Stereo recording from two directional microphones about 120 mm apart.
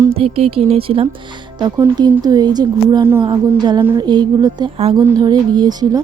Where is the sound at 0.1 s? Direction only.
55° right (ahead or behind).